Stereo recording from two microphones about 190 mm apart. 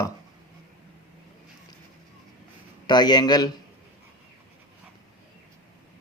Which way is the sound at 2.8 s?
20° left (ahead or behind).